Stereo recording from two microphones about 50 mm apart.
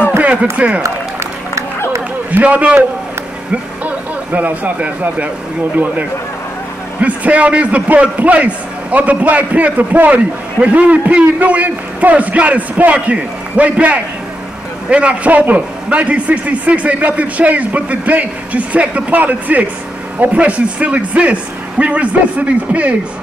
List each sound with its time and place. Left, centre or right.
0.2 s speech: right
2.3 s a man's voice: right
3.8 s speech: right
7.0 s a man's voice: right